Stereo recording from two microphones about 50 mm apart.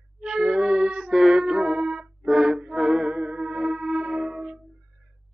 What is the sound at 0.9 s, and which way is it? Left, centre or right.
Music, centre.